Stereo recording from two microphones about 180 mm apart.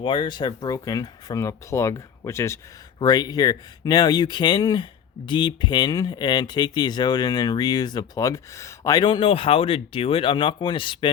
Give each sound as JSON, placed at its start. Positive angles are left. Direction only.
{"t": 0.0, "sound": "speech", "side_deg": 25}